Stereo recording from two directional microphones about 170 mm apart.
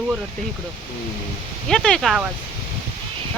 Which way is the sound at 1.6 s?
5° left (ahead or behind).